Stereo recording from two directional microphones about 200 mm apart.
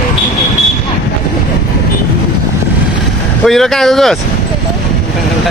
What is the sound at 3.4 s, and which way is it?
Speech, centre (ahead or behind).